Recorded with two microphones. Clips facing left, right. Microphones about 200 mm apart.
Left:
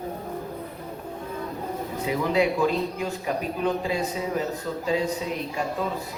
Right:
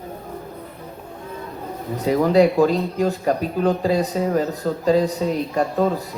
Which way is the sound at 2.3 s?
40° right (ahead or behind).